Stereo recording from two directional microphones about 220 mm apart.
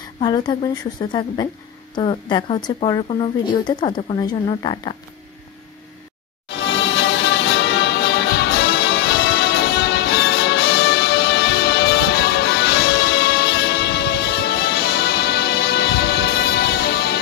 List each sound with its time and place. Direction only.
0.2 s speech: 20° left (ahead or behind)
6.5 s music: 55° left (ahead or behind)
9.4 s music: 50° left (ahead or behind)